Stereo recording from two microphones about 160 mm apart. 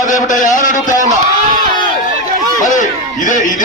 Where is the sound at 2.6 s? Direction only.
50° left (ahead or behind).